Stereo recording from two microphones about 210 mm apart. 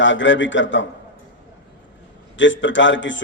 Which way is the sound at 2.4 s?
60° left (ahead or behind).